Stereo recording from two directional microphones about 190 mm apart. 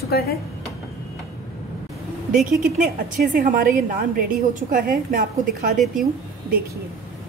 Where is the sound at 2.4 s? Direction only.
45° right (ahead or behind).